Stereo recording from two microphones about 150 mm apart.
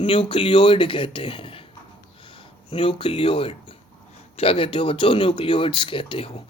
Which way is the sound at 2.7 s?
35° left (ahead or behind).